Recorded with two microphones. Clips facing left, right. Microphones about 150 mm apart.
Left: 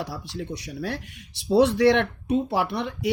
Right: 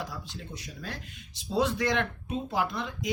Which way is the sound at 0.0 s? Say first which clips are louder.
Left 7 dB; 80° left.